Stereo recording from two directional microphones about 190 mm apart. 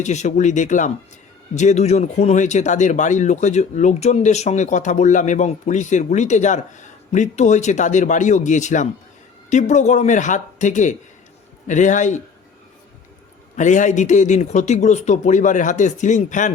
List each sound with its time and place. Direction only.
0.0 s speech: 40° left (ahead or behind)
13.6 s speech: 40° left (ahead or behind)